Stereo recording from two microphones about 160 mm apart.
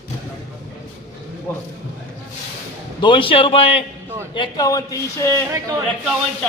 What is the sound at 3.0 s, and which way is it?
Speech, 30° left (ahead or behind).